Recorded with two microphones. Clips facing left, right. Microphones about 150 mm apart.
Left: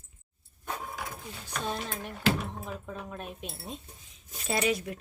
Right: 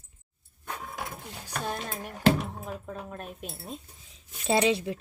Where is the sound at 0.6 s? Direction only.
5° left (ahead or behind).